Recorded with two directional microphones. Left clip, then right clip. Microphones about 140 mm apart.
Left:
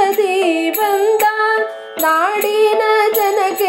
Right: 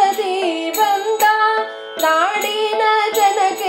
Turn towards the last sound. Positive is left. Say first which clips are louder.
# even
turn(degrees=50)  # may be behind; listen again after turning